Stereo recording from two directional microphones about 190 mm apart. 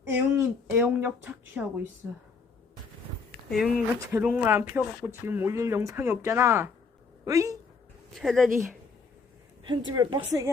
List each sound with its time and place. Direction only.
0.1 s speech: 10° right (ahead or behind)
3.5 s speech: centre (ahead or behind); by 7.5 s 15° right (ahead or behind)
8.1 s speech: centre (ahead or behind)
9.6 s a woman's voice: 20° right (ahead or behind)